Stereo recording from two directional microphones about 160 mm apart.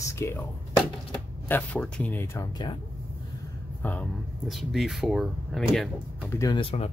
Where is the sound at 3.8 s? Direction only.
10° left (ahead or behind).